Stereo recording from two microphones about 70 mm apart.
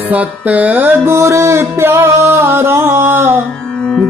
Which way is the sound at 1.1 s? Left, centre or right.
Right.